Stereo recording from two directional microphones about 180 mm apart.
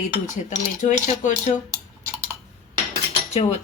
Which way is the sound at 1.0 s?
45° left (ahead or behind).